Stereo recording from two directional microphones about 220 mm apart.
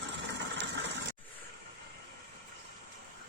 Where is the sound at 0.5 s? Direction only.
55° right (ahead or behind).